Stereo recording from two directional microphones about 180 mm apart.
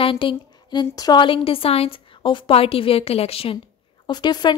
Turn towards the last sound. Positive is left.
turn(degrees=25)  # may be behind; listen again after turning